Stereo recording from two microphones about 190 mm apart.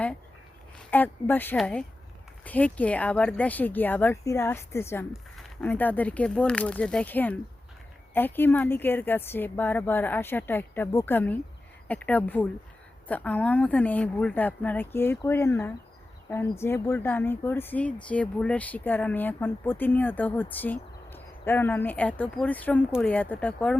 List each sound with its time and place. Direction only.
0.9 s speech: 10° left (ahead or behind)